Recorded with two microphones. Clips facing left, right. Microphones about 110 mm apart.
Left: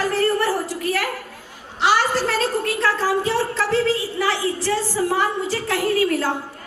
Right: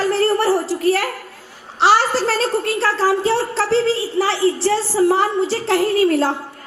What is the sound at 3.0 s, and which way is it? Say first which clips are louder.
Speech: right 6 dB; 40° right (ahead or behind).